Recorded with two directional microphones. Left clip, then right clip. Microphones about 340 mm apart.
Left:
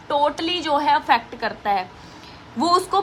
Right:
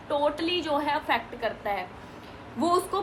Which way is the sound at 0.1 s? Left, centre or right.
Left.